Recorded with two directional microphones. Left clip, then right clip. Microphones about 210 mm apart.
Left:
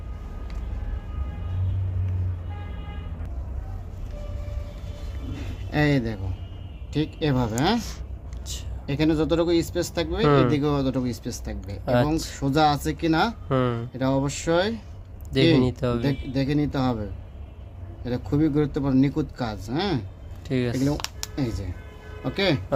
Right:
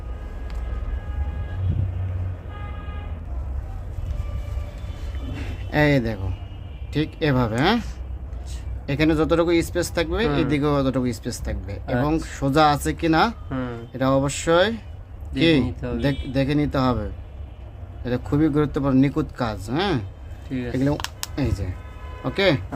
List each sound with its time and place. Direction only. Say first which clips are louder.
5.3 s a sound: right 4 dB; 10° right (ahead or behind)
6.9 s a man's voice: right 3 dB; 10° right (ahead or behind)
8.9 s a man's voice: right 3 dB; 10° right (ahead or behind)
13.5 s speech: left 6 dB; 60° left (ahead or behind)
13.9 s a man's voice: right 4 dB; 10° right (ahead or behind)
15.6 s speech: left 4 dB; 55° left (ahead or behind)
16.0 s a man's voice: right 3 dB; 10° right (ahead or behind)
20.5 s speech: left 4 dB; 60° left (ahead or behind)
20.7 s a man's voice: right 3 dB; 5° right (ahead or behind)